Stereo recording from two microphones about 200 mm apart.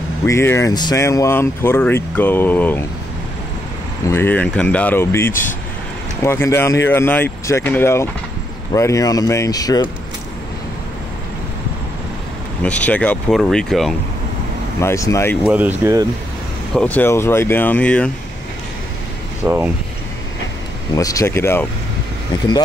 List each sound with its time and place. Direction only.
0.3 s speech: 15° left (ahead or behind)
4.1 s speech: 10° left (ahead or behind)
12.6 s speech: 5° left (ahead or behind)
14.8 s speech: 15° left (ahead or behind)
15.4 s speech: 10° right (ahead or behind)
16.7 s speech: 5° left (ahead or behind)
19.4 s speech: 10° right (ahead or behind)
20.9 s speech: 15° left (ahead or behind)